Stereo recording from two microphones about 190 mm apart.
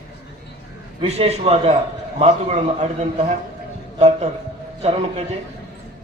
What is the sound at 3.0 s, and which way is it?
Speech, 35° right (ahead or behind).